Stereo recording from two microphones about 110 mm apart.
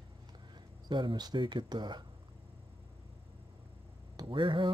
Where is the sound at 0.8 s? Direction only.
45° right (ahead or behind).